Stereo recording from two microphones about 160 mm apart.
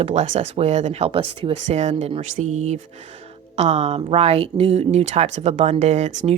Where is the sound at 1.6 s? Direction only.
45° right (ahead or behind).